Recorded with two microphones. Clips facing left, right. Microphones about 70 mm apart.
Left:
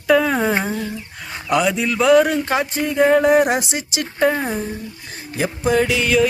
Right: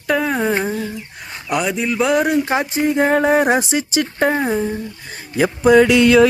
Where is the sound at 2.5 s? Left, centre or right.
Centre.